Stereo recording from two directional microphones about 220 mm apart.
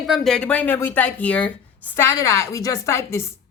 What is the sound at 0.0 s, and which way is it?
A woman's voice, centre (ahead or behind).